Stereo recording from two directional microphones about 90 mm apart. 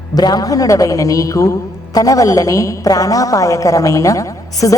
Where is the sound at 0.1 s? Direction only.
45° left (ahead or behind).